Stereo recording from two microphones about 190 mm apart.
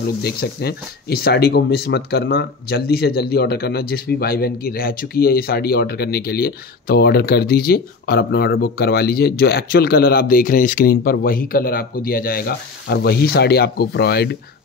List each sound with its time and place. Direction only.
0.2 s speech: 55° left (ahead or behind)